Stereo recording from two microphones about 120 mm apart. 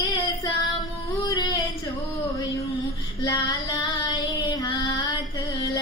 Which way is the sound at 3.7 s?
35° left (ahead or behind).